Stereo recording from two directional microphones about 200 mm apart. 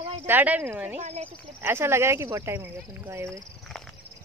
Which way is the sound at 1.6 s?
10° right (ahead or behind).